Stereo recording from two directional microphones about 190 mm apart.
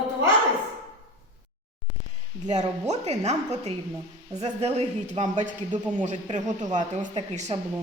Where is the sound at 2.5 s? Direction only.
35° right (ahead or behind).